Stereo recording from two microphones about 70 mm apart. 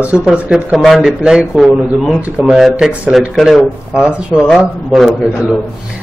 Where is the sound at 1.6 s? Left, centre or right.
Centre.